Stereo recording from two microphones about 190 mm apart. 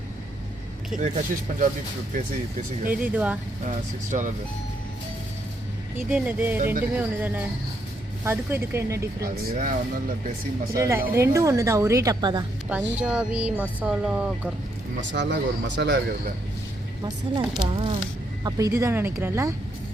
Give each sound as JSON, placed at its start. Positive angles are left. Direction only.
{"t": 0.9, "sound": "speech", "side_deg": -40}
{"t": 2.9, "sound": "speech", "side_deg": -10}
{"t": 6.0, "sound": "speech", "side_deg": -10}
{"t": 9.2, "sound": "speech", "side_deg": -50}
{"t": 10.8, "sound": "speech", "side_deg": -15}
{"t": 12.6, "sound": "speech", "side_deg": -5}
{"t": 15.1, "sound": "speech", "side_deg": -65}
{"t": 17.0, "sound": "speech", "side_deg": -25}